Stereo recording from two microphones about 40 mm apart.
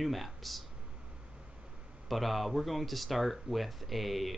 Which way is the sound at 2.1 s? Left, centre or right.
Centre.